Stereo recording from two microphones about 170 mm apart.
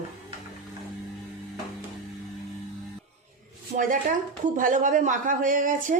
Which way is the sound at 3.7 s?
50° right (ahead or behind).